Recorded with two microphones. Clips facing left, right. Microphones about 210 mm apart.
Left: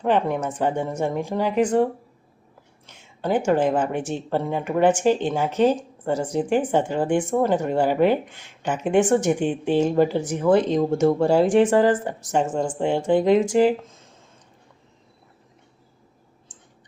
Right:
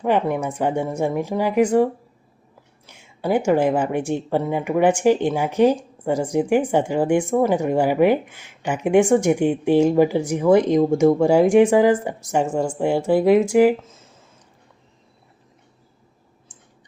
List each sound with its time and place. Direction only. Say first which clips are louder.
0.0 s speech: right 1 dB; 10° right (ahead or behind)